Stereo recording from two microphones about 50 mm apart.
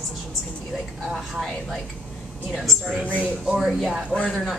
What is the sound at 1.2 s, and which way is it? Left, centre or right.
A woman's voice, centre.